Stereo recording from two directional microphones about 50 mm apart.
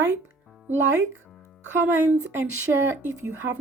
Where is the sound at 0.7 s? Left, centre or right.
Right.